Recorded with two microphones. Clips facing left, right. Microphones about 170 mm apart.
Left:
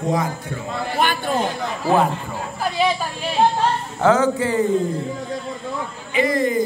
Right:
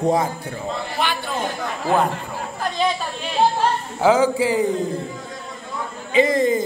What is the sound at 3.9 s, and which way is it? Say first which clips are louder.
Speech: right 1 dB; 10° right (ahead or behind).